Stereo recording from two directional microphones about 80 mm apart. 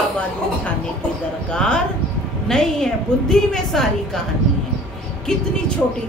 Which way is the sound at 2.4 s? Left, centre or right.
Centre.